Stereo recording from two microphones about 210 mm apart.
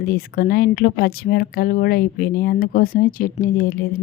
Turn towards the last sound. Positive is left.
turn(degrees=40)  # may be behind; listen again after turning